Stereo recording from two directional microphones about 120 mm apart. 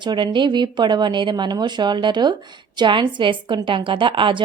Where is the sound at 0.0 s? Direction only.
40° right (ahead or behind).